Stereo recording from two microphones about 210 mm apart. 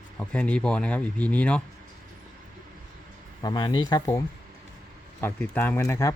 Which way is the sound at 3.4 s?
20° left (ahead or behind).